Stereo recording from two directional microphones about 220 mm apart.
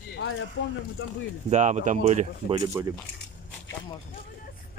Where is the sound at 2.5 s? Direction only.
15° right (ahead or behind).